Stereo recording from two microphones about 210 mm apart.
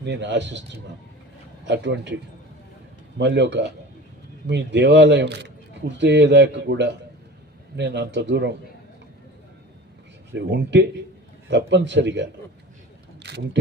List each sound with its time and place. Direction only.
0.0 s speech: 55° right (ahead or behind)
1.7 s speech: 55° right (ahead or behind)
3.2 s speech: 55° right (ahead or behind)
10.3 s speech: 55° right (ahead or behind)
13.2 s single-lens reflex camera: 55° right (ahead or behind)